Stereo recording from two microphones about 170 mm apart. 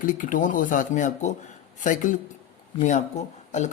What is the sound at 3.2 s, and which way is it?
Speech, 40° left (ahead or behind).